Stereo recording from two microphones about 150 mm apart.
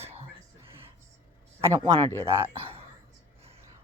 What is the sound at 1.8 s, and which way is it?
Speech, 30° right (ahead or behind).